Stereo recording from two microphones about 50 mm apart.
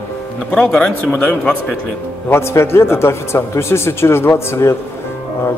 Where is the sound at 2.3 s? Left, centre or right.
Left.